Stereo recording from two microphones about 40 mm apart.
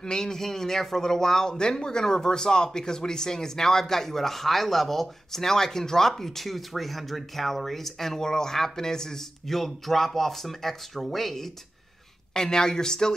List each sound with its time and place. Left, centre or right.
0.0 s speech: centre
12.4 s speech: centre